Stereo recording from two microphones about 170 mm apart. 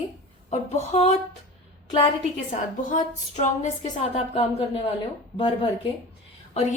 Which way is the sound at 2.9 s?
45° left (ahead or behind).